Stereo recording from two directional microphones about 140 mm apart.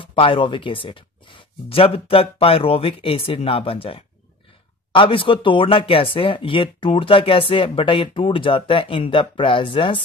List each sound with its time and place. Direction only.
0.0 s speech: 40° left (ahead or behind)